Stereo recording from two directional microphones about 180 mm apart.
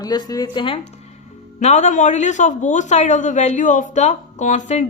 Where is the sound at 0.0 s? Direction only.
20° left (ahead or behind).